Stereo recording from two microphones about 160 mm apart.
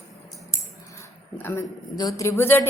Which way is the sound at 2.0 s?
25° left (ahead or behind).